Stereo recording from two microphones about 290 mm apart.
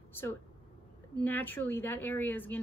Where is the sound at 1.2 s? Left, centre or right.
Centre.